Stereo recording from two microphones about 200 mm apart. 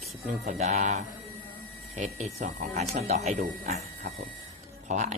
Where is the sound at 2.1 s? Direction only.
35° right (ahead or behind).